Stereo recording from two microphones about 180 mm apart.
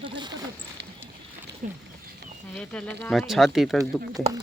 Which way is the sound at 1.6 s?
40° right (ahead or behind).